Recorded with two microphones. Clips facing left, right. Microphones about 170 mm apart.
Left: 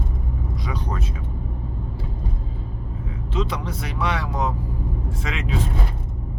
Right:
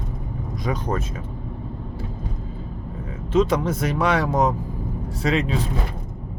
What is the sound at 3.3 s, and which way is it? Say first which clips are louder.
Speech: right 8 dB; 45° right (ahead or behind).